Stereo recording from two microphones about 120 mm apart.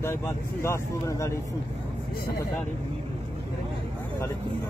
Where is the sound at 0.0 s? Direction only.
20° left (ahead or behind).